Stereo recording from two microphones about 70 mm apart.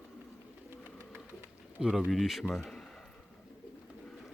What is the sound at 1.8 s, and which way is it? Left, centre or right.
Speech, centre.